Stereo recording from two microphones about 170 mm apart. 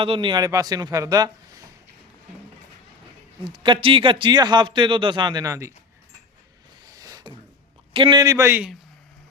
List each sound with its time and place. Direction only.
0.0 s a man's voice: 30° right (ahead or behind)
3.4 s a man's voice: 30° right (ahead or behind)
6.8 s a sound: 20° right (ahead or behind)
7.9 s a man's voice: 30° right (ahead or behind)